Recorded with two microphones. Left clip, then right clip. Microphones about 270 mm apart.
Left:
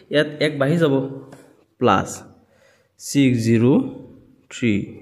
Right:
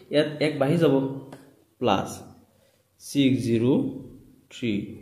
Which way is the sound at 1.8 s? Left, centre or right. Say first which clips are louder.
Left 6 dB; left.